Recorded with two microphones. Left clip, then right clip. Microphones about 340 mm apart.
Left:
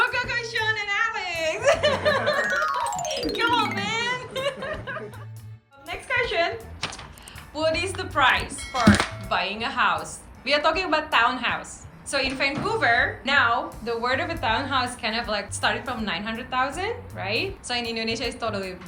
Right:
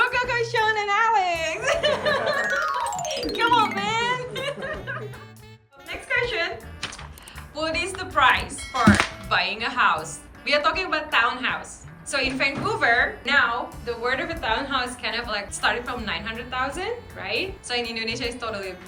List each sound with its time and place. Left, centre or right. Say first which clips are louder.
0.0 s a sound: right 2 dB; centre
1.6 s snicker: left 2 dB; centre
2.4 s music: even; centre
12.1 s a woman's voice: right 1 dB; centre